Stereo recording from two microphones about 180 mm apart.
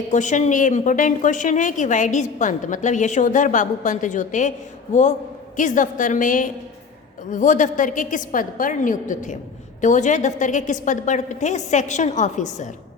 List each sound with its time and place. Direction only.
0.1 s a woman's voice: 45° left (ahead or behind)